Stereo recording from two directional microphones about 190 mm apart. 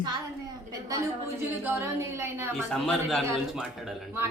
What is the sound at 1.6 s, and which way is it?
Speech, 15° right (ahead or behind).